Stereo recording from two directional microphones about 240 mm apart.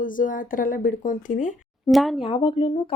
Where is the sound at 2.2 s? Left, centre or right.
Left.